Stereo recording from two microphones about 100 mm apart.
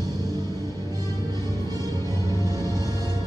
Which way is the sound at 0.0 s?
40° right (ahead or behind).